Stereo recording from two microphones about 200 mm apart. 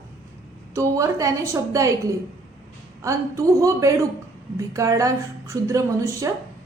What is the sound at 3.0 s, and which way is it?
A woman's voice, 15° right (ahead or behind).